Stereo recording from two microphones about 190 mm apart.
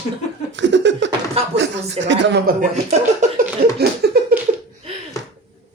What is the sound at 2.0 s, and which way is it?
Speech, 70° right (ahead or behind).